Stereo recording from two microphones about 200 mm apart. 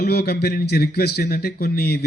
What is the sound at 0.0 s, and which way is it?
A man's voice, 50° left (ahead or behind).